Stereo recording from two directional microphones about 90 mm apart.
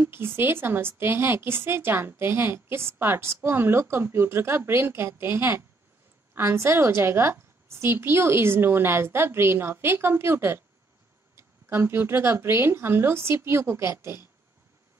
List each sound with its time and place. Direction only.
0.0 s a woman's voice: 25° right (ahead or behind)